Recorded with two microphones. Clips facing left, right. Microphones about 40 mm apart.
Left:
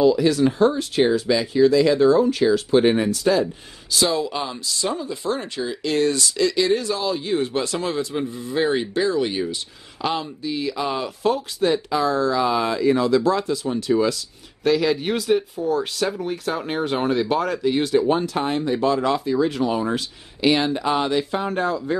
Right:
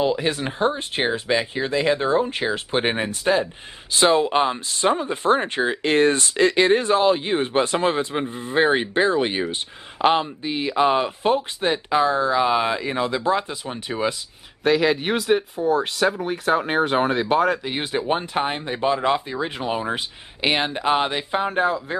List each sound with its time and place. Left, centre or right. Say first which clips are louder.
0.0 s speech: left 5 dB; right
14.6 s speech: right 1 dB; centre
17.6 s speech: left 5 dB; right
21.5 s speech: right 1 dB; centre